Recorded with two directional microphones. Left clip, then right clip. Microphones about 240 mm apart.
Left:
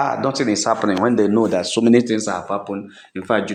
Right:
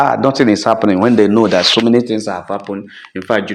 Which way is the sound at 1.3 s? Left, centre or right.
Centre.